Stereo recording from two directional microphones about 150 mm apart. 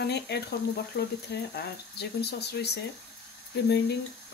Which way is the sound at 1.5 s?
90° left.